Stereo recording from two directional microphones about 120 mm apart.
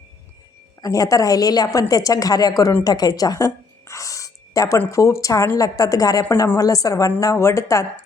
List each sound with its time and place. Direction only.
0.8 s a woman's voice: 30° left (ahead or behind)
2.8 s a sound: 35° left (ahead or behind)
4.9 s a woman's voice: 25° left (ahead or behind)